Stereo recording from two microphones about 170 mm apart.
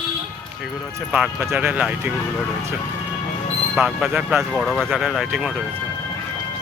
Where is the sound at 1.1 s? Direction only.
10° right (ahead or behind).